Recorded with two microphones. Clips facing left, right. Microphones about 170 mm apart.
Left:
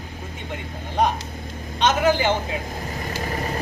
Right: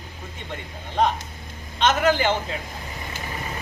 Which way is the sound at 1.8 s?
15° left (ahead or behind).